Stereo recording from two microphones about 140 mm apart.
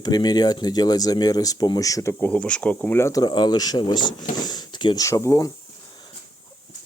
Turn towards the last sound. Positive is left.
turn(degrees=25)  # may be behind; listen again after turning